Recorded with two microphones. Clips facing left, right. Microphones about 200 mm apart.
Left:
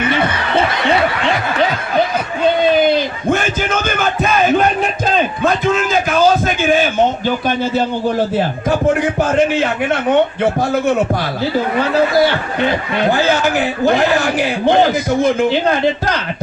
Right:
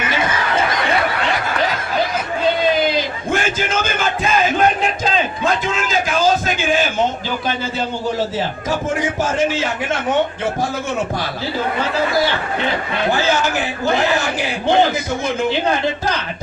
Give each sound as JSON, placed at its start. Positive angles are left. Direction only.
{"t": 3.7, "sound": "music", "side_deg": 60}
{"t": 5.6, "sound": "a sound", "side_deg": 55}
{"t": 9.0, "sound": "a man's voice", "side_deg": 60}
{"t": 13.1, "sound": "a man's voice", "side_deg": 60}